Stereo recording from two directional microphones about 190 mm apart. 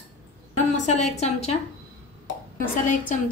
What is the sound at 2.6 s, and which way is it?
Speech, 45° left (ahead or behind).